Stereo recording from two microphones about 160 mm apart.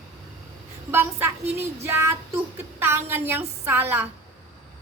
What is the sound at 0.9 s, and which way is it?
A woman's voice, 15° right (ahead or behind).